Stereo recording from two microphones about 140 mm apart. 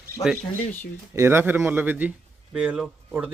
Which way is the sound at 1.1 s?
20° right (ahead or behind).